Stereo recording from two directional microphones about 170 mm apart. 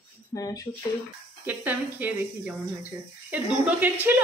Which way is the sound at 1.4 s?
10° right (ahead or behind).